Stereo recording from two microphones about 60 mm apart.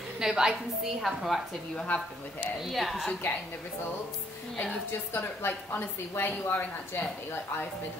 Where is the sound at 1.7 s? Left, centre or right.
Centre.